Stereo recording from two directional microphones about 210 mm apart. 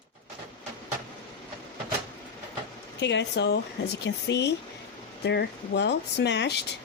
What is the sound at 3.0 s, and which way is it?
Speech, 55° left (ahead or behind).